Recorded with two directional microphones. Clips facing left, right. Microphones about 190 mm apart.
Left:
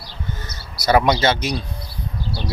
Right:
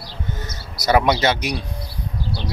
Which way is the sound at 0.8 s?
20° right (ahead or behind).